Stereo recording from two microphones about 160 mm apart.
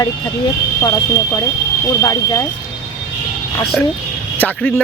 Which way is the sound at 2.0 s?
20° left (ahead or behind).